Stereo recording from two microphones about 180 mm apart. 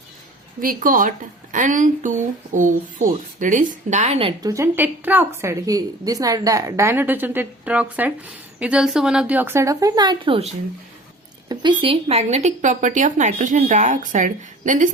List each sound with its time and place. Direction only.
0.6 s speech: 50° right (ahead or behind); by 4.4 s 35° right (ahead or behind)
4.4 s a woman's voice: 15° right (ahead or behind)
11.8 s speech: 30° right (ahead or behind)